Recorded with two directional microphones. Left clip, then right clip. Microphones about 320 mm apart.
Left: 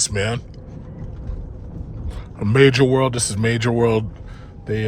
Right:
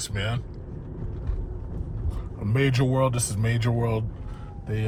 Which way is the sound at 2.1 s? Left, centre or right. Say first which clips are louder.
Left 9 dB; left.